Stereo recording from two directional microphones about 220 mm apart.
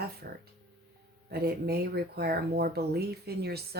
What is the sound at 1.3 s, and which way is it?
Speech, 45° right (ahead or behind).